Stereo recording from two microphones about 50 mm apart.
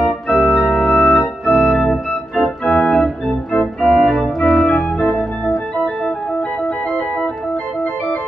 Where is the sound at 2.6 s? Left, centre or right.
Left.